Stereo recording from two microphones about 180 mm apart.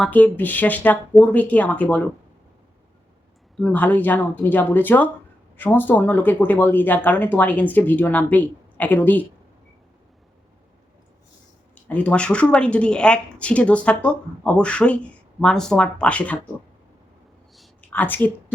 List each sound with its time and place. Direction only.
0.0 s speech: 10° left (ahead or behind)
3.6 s speech: 10° left (ahead or behind)
11.7 s speech: 10° left (ahead or behind)
17.5 s a sound: 5° left (ahead or behind)